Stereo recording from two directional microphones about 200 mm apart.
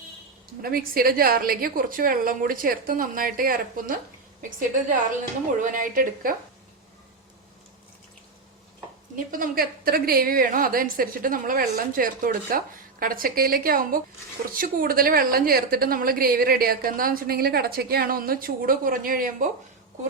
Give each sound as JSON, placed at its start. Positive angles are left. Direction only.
{"t": 0.6, "sound": "a woman's voice", "side_deg": -45}
{"t": 5.5, "sound": "a woman's voice", "side_deg": -40}
{"t": 9.3, "sound": "a woman's voice", "side_deg": -45}